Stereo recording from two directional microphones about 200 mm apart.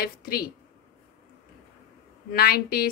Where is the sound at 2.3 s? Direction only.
50° left (ahead or behind).